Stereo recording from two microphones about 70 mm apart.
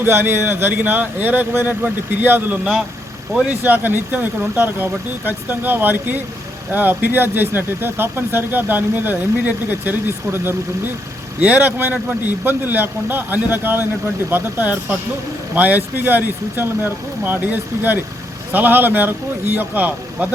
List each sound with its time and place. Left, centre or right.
0.0 s speech: right
11.3 s speech: right